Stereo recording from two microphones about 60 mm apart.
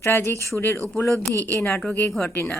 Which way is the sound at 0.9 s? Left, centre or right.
Left.